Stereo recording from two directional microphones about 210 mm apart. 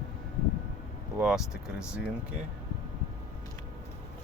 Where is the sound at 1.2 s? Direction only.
5° right (ahead or behind).